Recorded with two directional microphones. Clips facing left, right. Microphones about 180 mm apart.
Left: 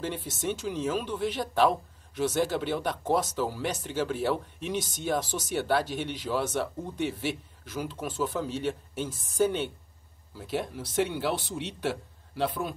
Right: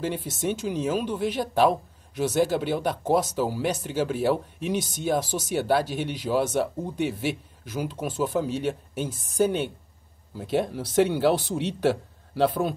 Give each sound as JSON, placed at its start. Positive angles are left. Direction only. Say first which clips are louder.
{"t": 0.0, "sound": "speech", "louder": "right 4 dB", "side_deg": -10}
{"t": 10.3, "sound": "speech", "louder": "right 6 dB", "side_deg": -25}